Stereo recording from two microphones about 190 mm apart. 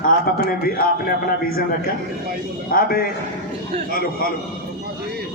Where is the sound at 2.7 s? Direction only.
50° left (ahead or behind).